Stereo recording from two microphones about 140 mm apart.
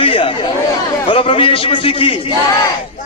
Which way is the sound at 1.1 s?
40° left (ahead or behind).